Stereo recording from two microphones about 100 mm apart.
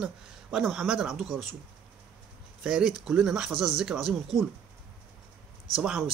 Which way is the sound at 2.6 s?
5° right (ahead or behind).